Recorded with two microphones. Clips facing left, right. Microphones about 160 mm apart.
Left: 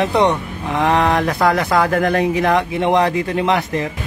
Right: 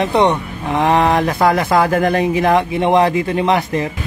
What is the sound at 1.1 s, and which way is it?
Speech, 25° right (ahead or behind).